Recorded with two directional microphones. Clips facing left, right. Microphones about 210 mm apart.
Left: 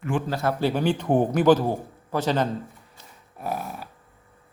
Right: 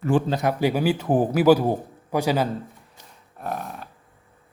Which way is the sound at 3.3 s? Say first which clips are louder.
Even; 5° left (ahead or behind).